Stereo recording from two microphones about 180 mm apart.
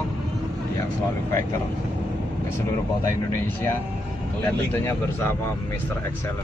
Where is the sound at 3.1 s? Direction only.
15° left (ahead or behind).